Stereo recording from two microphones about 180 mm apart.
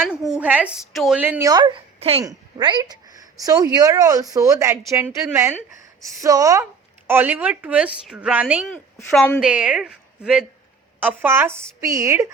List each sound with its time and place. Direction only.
0.3 s a woman's voice: 10° right (ahead or behind)
8.7 s a woman's voice: 5° left (ahead or behind)
9.4 s a woman's voice: 5° right (ahead or behind)